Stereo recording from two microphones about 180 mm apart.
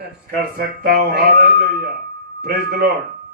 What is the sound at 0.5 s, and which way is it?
Speech, 55° right (ahead or behind).